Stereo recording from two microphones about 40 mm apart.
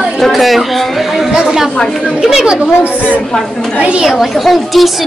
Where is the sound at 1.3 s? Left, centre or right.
Centre.